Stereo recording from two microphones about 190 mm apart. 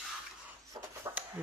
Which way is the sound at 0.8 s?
20° right (ahead or behind).